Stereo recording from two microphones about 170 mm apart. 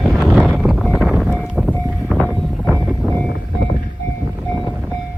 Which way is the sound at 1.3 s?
10° left (ahead or behind).